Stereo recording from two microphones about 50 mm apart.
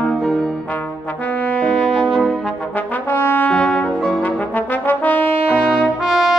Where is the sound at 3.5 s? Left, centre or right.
Left.